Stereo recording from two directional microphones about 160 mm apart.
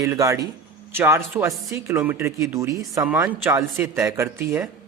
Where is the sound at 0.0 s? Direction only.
20° right (ahead or behind).